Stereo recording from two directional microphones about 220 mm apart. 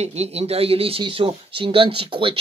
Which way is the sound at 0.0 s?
30° right (ahead or behind).